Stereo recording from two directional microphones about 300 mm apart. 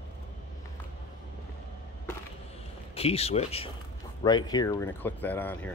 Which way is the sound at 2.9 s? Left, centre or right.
Centre.